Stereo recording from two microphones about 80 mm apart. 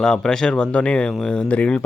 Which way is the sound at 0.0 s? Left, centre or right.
Centre.